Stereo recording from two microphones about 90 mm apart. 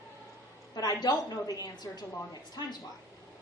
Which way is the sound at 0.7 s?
50° left (ahead or behind).